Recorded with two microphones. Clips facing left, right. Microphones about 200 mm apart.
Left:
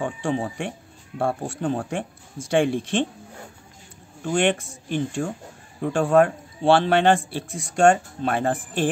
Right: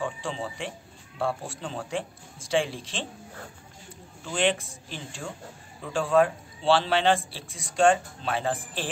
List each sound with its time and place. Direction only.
0.0 s a man's voice: 55° left (ahead or behind)
4.2 s a man's voice: 50° left (ahead or behind)